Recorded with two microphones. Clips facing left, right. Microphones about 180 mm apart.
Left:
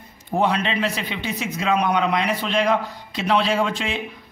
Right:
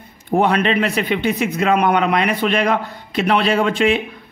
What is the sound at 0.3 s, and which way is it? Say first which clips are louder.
Speech: right 5 dB; 60° right (ahead or behind).